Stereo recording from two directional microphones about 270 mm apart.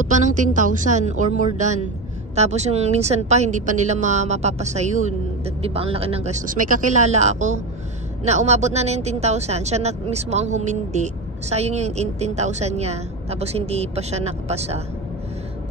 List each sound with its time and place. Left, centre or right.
0.0 s speech: right